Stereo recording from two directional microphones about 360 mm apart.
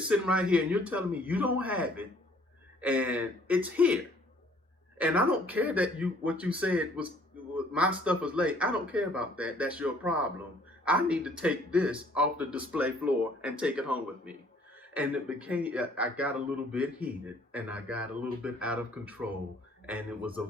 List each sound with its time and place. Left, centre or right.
0.1 s a man's voice: centre